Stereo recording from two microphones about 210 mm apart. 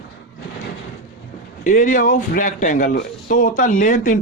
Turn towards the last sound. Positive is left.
turn(degrees=35)  # may be behind; listen again after turning